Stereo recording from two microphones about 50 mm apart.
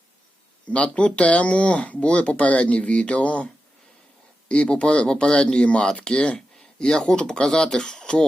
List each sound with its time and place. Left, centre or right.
0.7 s speech: left